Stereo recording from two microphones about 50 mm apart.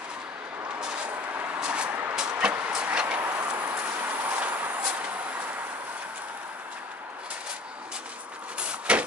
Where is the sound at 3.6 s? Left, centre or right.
Right.